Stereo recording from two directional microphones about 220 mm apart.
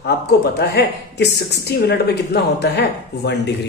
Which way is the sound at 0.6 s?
50° left (ahead or behind).